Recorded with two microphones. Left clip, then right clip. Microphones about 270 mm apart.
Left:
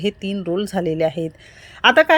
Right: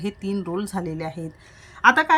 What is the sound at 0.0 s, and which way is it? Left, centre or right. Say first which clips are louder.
A woman's voice: left 5 dB; centre.